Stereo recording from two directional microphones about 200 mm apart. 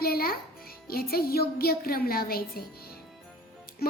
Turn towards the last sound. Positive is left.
turn(degrees=50)  # may be behind; listen again after turning